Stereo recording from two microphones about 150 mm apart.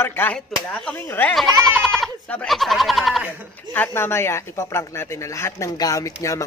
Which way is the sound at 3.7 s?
15° left (ahead or behind).